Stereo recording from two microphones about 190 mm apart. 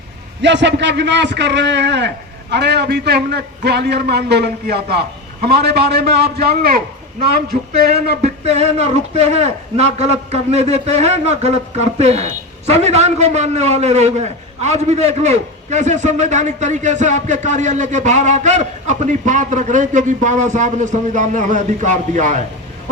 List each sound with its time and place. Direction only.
0.4 s a man's voice: 70° right (ahead or behind); by 6.8 s 55° right (ahead or behind)
8.5 s a man's voice: 35° right (ahead or behind)